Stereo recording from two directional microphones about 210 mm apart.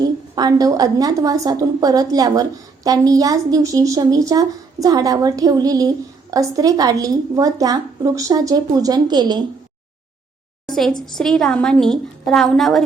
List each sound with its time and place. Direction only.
0.0 s a woman's voice: 20° right (ahead or behind)
10.7 s a woman's voice: centre (ahead or behind)